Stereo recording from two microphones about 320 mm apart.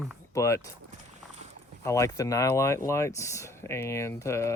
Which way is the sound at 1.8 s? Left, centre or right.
Centre.